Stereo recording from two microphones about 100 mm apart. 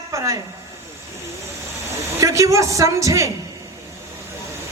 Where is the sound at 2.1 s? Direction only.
35° right (ahead or behind).